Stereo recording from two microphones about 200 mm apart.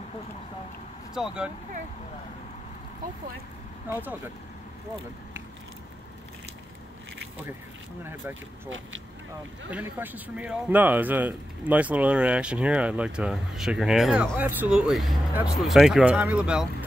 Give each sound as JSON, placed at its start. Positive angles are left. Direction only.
{"t": 1.1, "sound": "speech", "side_deg": -5}
{"t": 3.9, "sound": "speech", "side_deg": -10}
{"t": 8.0, "sound": "speech", "side_deg": -10}
{"t": 8.6, "sound": "speech", "side_deg": -75}
{"t": 9.7, "sound": "speech", "side_deg": -10}